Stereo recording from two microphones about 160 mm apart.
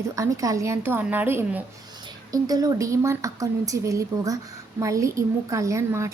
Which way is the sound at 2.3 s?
25° right (ahead or behind).